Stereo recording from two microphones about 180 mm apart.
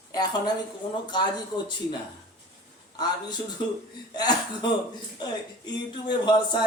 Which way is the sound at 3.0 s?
25° left (ahead or behind).